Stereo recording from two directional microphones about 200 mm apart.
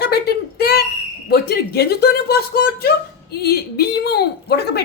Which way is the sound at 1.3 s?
50° left (ahead or behind).